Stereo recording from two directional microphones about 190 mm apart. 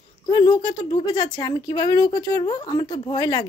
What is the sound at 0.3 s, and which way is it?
Speech, 20° left (ahead or behind).